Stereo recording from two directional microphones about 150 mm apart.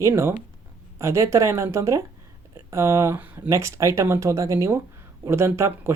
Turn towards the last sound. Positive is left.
turn(degrees=-15)  # may be behind; listen again after turning